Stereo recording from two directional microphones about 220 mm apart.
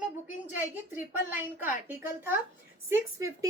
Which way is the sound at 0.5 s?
10° right (ahead or behind).